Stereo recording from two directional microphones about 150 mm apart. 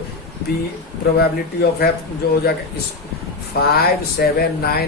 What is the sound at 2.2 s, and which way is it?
Speech, 90° left.